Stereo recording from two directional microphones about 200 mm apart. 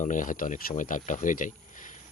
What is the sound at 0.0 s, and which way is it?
Speech, 40° left (ahead or behind).